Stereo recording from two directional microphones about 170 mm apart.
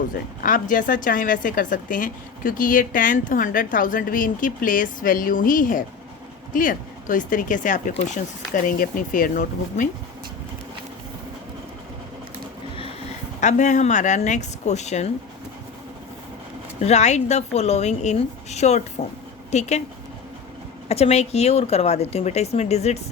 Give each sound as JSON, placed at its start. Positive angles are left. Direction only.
{"t": 0.4, "sound": "a woman's voice", "side_deg": 50}
{"t": 13.4, "sound": "a woman's voice", "side_deg": 45}
{"t": 16.8, "sound": "speech", "side_deg": 40}
{"t": 20.8, "sound": "speech", "side_deg": 40}